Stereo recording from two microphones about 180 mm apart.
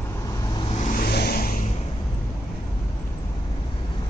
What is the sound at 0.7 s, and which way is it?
Vehicle, 45° left (ahead or behind).